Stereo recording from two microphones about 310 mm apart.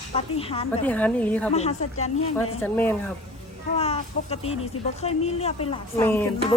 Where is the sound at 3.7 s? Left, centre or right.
Centre.